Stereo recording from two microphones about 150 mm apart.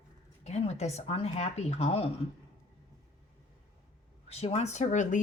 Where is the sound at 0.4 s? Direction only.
45° left (ahead or behind).